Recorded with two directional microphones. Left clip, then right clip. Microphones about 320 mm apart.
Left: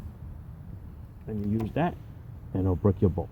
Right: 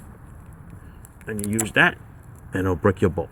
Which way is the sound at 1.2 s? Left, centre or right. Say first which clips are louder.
Right 6 dB; centre.